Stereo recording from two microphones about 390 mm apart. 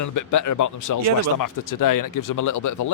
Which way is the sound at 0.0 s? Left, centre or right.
Left.